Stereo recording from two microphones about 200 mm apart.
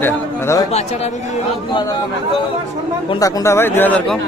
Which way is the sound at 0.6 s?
30° left (ahead or behind).